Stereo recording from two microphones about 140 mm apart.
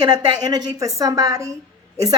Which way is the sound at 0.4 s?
25° right (ahead or behind).